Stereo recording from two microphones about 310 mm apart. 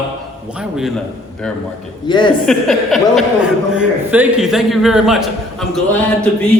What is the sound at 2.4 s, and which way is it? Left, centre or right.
A man's voice, centre.